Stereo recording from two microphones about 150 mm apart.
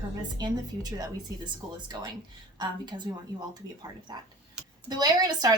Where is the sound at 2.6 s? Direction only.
30° right (ahead or behind).